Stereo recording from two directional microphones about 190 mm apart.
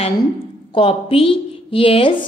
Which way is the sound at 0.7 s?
30° left (ahead or behind).